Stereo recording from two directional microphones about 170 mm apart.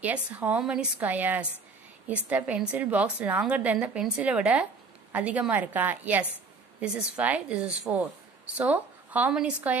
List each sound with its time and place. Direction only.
0.0 s a woman's voice: 10° right (ahead or behind)